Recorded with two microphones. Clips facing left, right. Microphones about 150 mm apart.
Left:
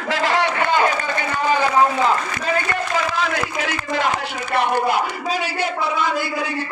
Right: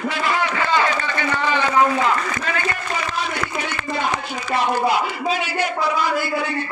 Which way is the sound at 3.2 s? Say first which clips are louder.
Left 3 dB; 90° left.